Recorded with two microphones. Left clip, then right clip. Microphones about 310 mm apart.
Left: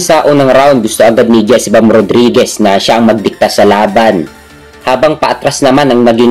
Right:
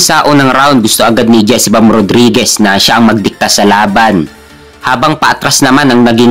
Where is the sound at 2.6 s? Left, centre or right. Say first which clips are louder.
Even; right.